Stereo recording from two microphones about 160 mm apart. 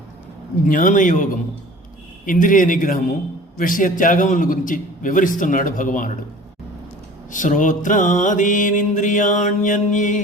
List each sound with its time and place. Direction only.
0.7 s a man's voice: 55° left (ahead or behind)
7.3 s music: 55° left (ahead or behind)